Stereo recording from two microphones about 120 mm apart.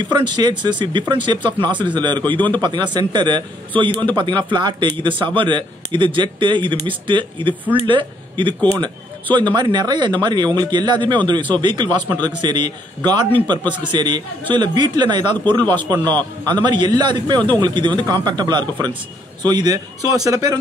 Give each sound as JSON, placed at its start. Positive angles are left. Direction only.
{"t": 0.0, "sound": "a man's voice", "side_deg": -40}